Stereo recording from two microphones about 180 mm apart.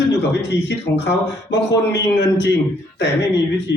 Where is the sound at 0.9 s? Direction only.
70° left (ahead or behind).